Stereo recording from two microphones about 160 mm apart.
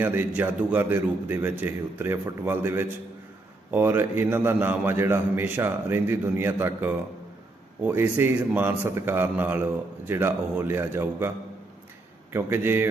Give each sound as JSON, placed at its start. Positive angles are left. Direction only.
{"t": 0.0, "sound": "a man's voice", "side_deg": -10}
{"t": 12.3, "sound": "a man's voice", "side_deg": -15}